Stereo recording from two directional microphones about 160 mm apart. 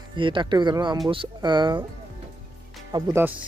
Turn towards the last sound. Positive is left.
turn(degrees=-15)  # may be behind; listen again after turning